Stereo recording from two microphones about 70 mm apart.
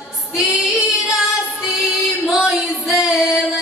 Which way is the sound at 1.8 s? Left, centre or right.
Centre.